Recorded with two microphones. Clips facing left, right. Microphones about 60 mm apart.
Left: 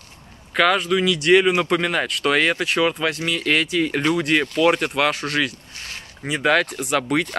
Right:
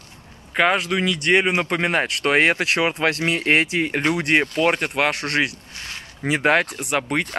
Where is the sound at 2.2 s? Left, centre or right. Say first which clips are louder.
Right 1 dB; right.